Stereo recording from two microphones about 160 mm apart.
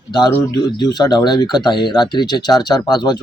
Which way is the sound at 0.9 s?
25° left (ahead or behind).